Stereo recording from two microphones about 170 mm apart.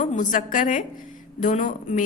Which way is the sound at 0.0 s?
45° left (ahead or behind).